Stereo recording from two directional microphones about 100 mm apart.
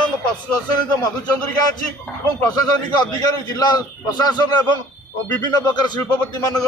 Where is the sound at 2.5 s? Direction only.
40° left (ahead or behind).